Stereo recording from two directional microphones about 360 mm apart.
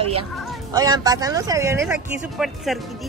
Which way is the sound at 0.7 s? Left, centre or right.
Centre.